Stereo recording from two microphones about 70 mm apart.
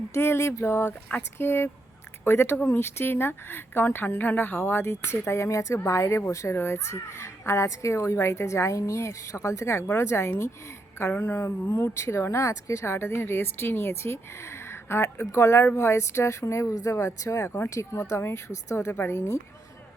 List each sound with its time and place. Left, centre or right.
0.1 s a child's voice: left